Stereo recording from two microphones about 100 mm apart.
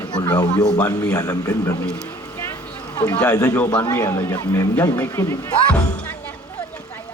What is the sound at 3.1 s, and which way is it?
A man's voice, 15° left (ahead or behind).